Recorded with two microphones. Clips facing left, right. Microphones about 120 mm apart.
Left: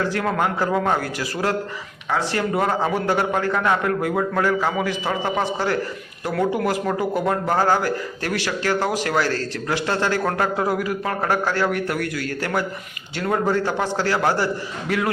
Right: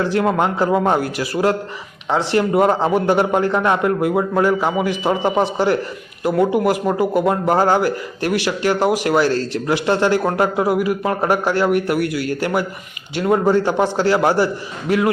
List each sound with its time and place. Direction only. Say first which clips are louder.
0.0 s a man's voice: right 5 dB; 20° right (ahead or behind)